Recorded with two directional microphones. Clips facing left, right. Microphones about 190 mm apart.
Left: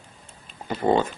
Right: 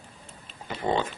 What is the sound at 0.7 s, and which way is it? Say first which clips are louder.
Speech: left 6 dB; 45° left (ahead or behind).